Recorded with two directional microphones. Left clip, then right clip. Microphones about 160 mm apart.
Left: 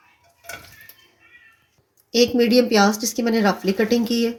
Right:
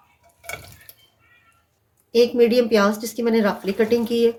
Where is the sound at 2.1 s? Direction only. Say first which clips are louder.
Right 1 dB; 50° left (ahead or behind).